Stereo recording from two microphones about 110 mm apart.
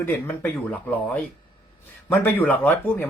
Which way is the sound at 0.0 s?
20° left (ahead or behind).